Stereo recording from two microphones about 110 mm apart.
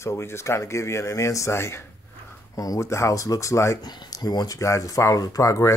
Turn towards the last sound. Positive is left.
turn(degrees=30)  # may be behind; listen again after turning